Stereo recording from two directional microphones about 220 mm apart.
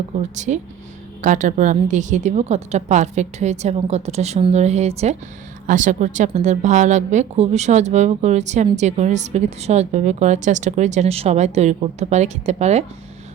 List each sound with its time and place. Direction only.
0.3 s a woman's voice: 35° right (ahead or behind)